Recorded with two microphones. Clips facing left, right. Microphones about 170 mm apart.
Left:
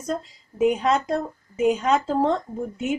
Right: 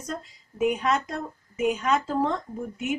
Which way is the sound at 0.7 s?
30° left (ahead or behind).